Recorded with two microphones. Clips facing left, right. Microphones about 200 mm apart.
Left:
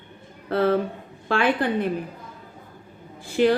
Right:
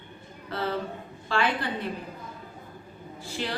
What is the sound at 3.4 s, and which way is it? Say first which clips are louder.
Speech: left 15 dB; 55° left (ahead or behind).